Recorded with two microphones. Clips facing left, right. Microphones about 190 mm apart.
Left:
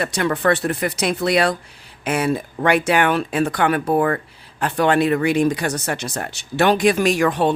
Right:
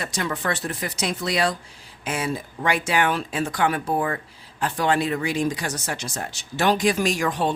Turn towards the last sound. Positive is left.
turn(degrees=65)  # may be behind; listen again after turning